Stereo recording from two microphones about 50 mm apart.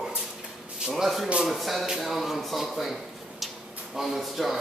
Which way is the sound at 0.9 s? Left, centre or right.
Centre.